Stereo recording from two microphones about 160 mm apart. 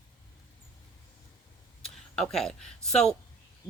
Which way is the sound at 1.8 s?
5° left (ahead or behind).